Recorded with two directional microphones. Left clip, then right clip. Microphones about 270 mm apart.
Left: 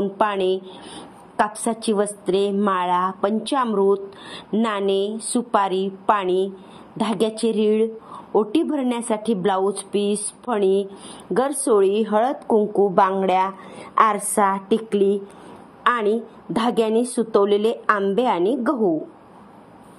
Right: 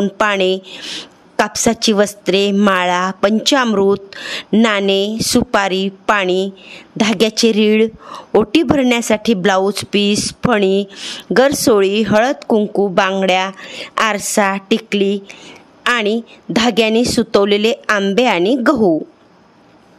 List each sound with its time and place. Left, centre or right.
0.0 s a woman's voice: right